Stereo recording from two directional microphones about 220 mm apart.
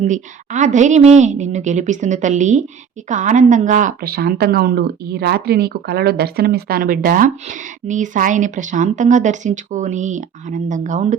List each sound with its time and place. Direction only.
0.0 s a woman's voice: 35° right (ahead or behind)